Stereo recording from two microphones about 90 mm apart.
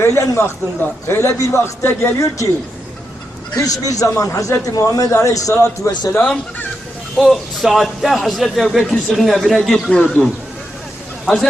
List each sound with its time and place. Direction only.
0.0 s a man's voice: 30° left (ahead or behind)
2.1 s a man's voice: 35° left (ahead or behind)
3.5 s a man's voice: 40° left (ahead or behind)
6.1 s speech: 20° left (ahead or behind)
7.2 s a man's voice: centre (ahead or behind)
9.9 s speech: 10° left (ahead or behind)